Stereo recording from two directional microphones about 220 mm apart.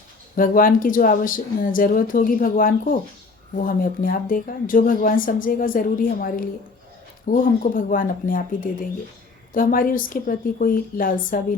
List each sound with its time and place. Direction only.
0.3 s speech: 40° left (ahead or behind)